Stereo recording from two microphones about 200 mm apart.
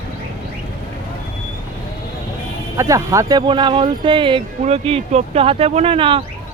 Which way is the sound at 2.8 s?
15° right (ahead or behind).